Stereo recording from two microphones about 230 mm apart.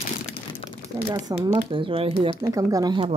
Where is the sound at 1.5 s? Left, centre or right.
Right.